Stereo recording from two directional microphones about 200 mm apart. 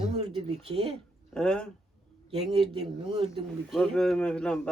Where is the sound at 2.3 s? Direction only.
30° right (ahead or behind).